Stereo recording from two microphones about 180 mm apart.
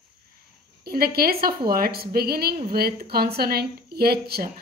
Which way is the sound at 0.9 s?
55° right (ahead or behind).